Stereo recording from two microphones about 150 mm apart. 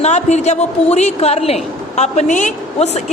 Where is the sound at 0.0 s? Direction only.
50° left (ahead or behind).